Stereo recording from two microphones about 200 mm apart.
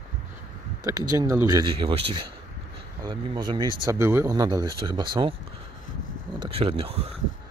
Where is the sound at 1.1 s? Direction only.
15° right (ahead or behind).